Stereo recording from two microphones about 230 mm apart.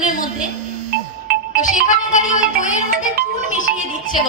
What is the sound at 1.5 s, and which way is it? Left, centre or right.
Music, left.